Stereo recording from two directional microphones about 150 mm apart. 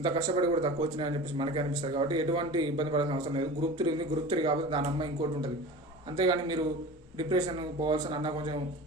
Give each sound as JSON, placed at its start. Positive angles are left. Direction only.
{"t": 0.0, "sound": "speech", "side_deg": -30}
{"t": 6.1, "sound": "speech", "side_deg": -30}